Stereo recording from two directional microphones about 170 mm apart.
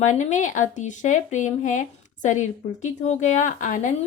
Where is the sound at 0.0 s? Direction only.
45° left (ahead or behind).